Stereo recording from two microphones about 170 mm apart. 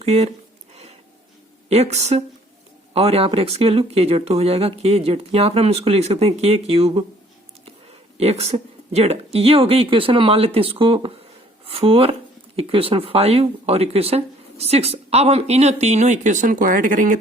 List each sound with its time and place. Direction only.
0.0 s speech: 40° right (ahead or behind)
1.7 s speech: 40° right (ahead or behind)
8.2 s speech: 35° right (ahead or behind)